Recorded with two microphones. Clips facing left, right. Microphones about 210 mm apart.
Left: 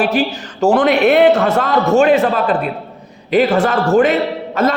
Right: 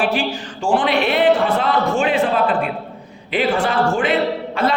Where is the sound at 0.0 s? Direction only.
40° left (ahead or behind).